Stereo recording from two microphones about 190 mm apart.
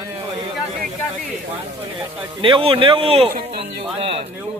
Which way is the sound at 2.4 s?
25° right (ahead or behind).